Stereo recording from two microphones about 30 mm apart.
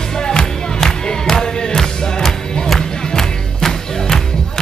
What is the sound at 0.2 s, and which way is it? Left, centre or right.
Music, left.